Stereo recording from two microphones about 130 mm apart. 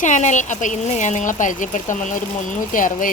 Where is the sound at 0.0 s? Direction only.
70° left (ahead or behind).